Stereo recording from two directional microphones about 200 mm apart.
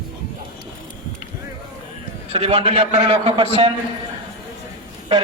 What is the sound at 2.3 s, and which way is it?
A man's voice, 30° right (ahead or behind).